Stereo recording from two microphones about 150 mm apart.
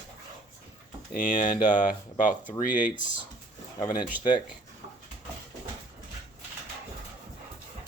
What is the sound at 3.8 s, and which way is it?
Speech, 25° left (ahead or behind).